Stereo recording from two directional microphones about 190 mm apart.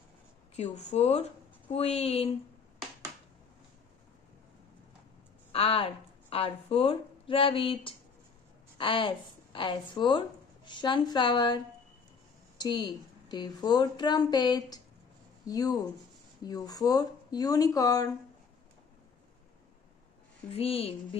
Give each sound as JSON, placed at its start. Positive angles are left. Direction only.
{"t": 0.6, "sound": "speech", "side_deg": 35}
{"t": 5.5, "sound": "a woman's voice", "side_deg": 30}
{"t": 20.5, "sound": "a woman's voice", "side_deg": 30}